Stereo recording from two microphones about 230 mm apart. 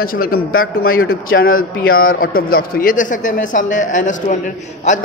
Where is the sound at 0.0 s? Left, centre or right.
Left.